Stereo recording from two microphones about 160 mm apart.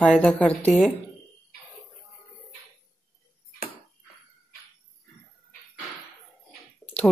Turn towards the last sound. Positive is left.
turn(degrees=5)  # may be behind; listen again after turning